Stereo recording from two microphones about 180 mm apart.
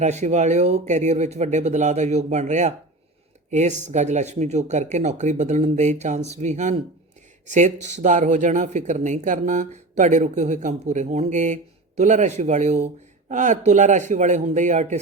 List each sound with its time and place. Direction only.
0.0 s speech: 40° right (ahead or behind)